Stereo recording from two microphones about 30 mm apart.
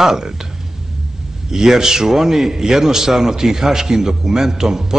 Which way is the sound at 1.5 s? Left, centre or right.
Centre.